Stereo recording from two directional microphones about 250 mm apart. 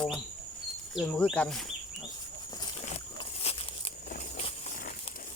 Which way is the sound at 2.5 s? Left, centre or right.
Centre.